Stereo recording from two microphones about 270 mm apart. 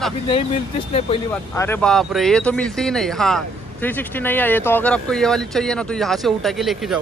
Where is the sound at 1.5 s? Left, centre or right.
Centre.